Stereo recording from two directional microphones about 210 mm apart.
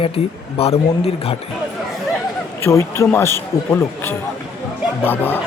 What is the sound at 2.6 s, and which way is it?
A man's voice, 15° left (ahead or behind).